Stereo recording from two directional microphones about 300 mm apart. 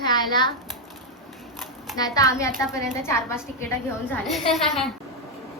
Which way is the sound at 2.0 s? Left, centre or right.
Centre.